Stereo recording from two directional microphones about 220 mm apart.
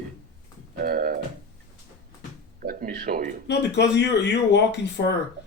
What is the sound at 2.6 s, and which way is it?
Speech, 40° right (ahead or behind).